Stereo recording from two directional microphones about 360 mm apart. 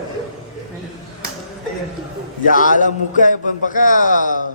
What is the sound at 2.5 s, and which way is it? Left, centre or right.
A man's voice, left.